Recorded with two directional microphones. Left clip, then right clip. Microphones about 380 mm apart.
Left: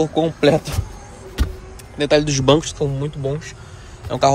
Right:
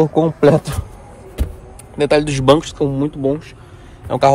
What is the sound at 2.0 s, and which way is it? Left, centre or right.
Speech, centre.